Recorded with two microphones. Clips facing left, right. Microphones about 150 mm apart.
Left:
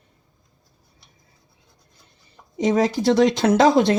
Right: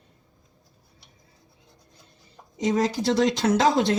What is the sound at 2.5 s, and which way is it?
Speech, 60° left (ahead or behind).